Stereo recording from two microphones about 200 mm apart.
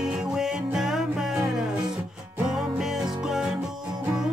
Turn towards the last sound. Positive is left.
turn(degrees=-5)  # may be behind; listen again after turning